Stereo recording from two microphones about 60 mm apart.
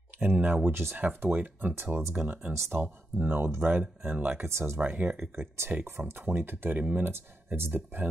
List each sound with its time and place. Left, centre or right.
0.2 s speech: right
5.2 s speech: right
6.8 s speech: right
7.5 s speech: right